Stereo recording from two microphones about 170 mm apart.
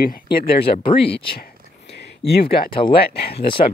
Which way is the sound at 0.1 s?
65° left (ahead or behind).